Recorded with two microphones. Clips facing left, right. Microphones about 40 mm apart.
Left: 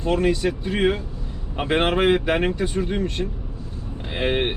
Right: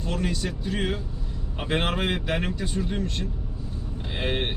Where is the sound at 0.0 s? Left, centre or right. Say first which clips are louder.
Left 9 dB; left.